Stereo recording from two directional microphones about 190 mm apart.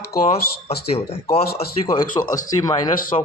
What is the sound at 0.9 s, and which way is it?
Speech, 30° left (ahead or behind).